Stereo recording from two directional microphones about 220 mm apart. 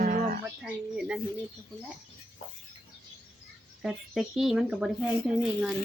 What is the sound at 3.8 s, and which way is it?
Speech, centre (ahead or behind).